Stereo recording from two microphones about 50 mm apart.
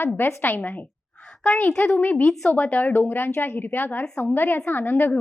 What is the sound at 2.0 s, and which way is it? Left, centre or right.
Speech, left.